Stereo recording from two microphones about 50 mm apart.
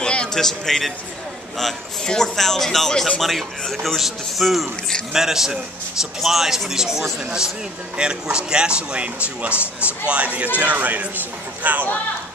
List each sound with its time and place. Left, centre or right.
0.0 s a sound: centre
0.3 s speech: centre
2.0 s a man's voice: centre; by 9.5 s right
9.5 s speech: left
9.8 s a man's voice: right